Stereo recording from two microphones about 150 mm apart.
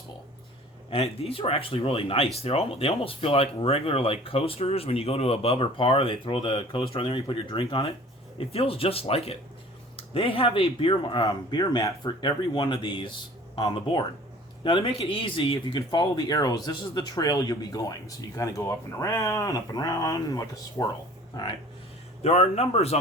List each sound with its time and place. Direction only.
0.9 s speech: 40° left (ahead or behind); by 20.8 s 25° left (ahead or behind)
22.2 s a man's voice: 45° left (ahead or behind)